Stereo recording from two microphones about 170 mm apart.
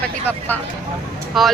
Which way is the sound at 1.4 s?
Centre (ahead or behind).